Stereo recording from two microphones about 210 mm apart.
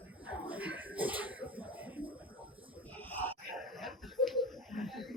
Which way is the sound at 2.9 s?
10° left (ahead or behind).